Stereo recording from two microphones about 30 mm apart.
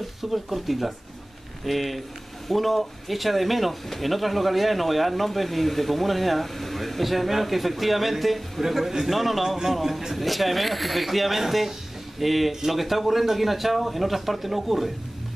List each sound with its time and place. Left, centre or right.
0.2 s speech: centre